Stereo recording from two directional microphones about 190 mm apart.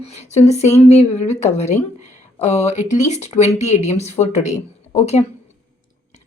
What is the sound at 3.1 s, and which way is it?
Speech, 35° left (ahead or behind).